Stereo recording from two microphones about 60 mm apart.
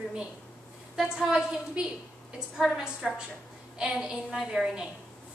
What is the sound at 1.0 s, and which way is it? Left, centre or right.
A woman's voice, centre.